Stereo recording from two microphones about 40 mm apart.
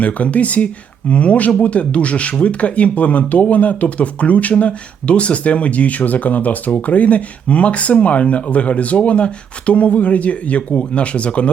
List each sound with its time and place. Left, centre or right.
0.0 s speech: left